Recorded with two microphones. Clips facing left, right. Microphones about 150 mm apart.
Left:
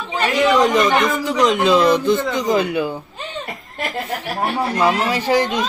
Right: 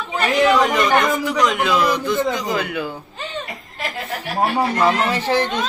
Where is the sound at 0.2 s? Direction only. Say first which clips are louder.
Left 1 dB; 20° left (ahead or behind).